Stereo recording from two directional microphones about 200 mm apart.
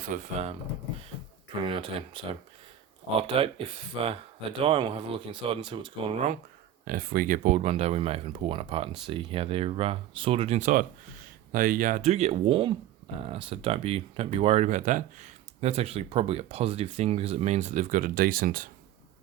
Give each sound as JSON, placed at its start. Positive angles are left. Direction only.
{"t": 0.1, "sound": "speech", "side_deg": -40}
{"t": 1.6, "sound": "speech", "side_deg": -25}
{"t": 6.8, "sound": "speech", "side_deg": -45}